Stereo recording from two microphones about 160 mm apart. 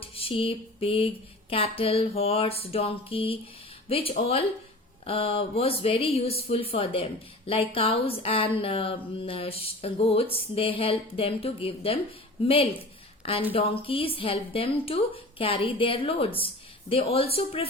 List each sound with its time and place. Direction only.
0.0 s speech: 35° left (ahead or behind)
13.5 s speech: 35° left (ahead or behind)